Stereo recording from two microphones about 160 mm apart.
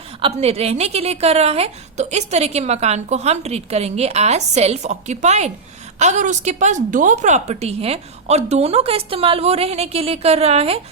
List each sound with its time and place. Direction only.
0.2 s a woman's voice: 40° right (ahead or behind)